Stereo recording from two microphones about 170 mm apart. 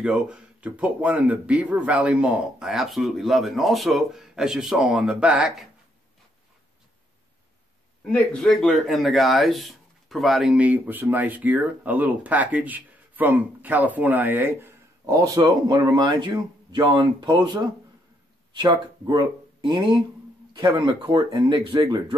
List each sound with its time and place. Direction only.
0.0 s speech: 5° right (ahead or behind)
8.1 s speech: 5° left (ahead or behind); by 21.8 s 25° right (ahead or behind)